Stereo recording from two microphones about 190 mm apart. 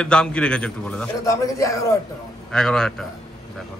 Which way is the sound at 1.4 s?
15° left (ahead or behind).